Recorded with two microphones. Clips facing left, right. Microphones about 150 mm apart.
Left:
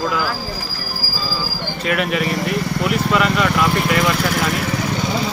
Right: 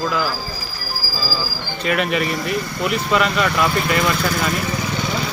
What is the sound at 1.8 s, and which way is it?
Speech, centre (ahead or behind).